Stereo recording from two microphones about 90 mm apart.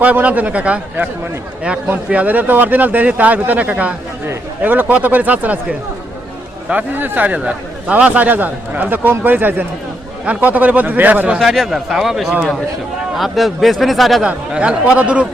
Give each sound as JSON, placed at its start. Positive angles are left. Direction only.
{"t": 0.0, "sound": "a man's voice", "side_deg": -15}
{"t": 11.3, "sound": "a man's voice", "side_deg": -5}
{"t": 14.3, "sound": "speech", "side_deg": -10}